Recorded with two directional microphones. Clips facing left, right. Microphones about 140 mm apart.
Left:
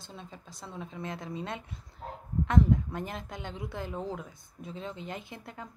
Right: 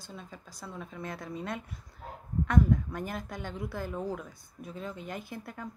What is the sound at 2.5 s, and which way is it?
Speech, 25° left (ahead or behind).